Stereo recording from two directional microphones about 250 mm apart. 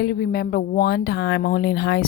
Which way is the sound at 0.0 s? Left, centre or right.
Left.